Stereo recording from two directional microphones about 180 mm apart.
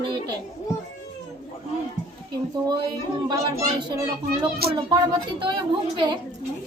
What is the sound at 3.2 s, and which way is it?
Speech, 20° right (ahead or behind).